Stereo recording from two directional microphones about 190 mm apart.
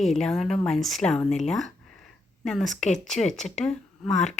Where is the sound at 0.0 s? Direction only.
Centre (ahead or behind).